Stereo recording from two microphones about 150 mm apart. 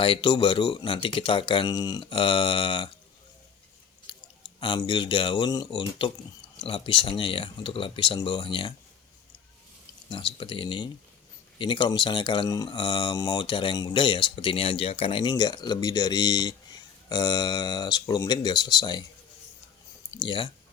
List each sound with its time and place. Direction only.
0.0 s speech: 30° left (ahead or behind)
4.1 s chewing: 35° left (ahead or behind)
4.6 s speech: 30° left (ahead or behind)
10.1 s speech: 35° left (ahead or behind)
20.2 s speech: 35° left (ahead or behind)